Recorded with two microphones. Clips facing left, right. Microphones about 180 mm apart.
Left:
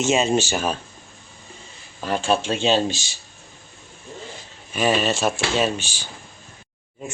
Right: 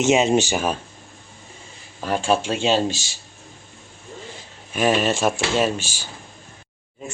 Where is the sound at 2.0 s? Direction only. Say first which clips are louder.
Right 1 dB; 10° right (ahead or behind).